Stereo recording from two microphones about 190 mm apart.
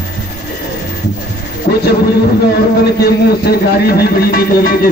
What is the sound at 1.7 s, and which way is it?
Speech, 55° left (ahead or behind).